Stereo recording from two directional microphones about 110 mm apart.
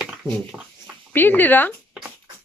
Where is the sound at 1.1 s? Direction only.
20° left (ahead or behind).